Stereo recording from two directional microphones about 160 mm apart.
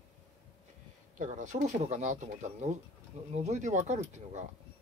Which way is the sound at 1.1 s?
50° right (ahead or behind).